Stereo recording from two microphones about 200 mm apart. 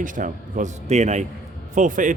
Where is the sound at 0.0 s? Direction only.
40° right (ahead or behind).